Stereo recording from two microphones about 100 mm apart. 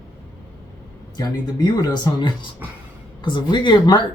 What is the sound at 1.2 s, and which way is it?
Speech, 45° left (ahead or behind).